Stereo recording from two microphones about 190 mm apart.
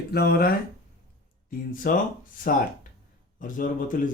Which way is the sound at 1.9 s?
45° left (ahead or behind).